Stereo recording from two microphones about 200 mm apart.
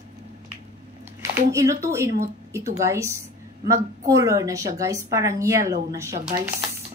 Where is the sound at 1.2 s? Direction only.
15° right (ahead or behind).